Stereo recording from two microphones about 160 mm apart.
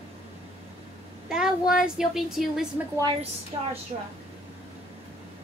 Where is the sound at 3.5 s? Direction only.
25° right (ahead or behind).